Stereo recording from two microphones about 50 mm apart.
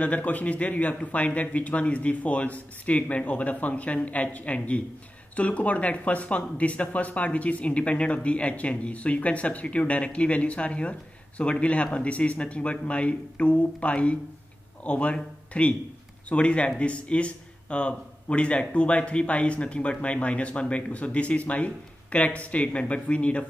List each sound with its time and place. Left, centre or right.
0.0 s speech: left